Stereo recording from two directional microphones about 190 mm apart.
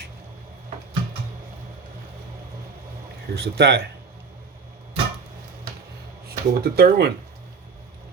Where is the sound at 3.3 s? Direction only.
60° right (ahead or behind).